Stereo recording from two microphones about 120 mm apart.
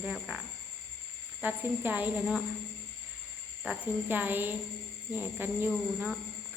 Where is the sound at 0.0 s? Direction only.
5° right (ahead or behind).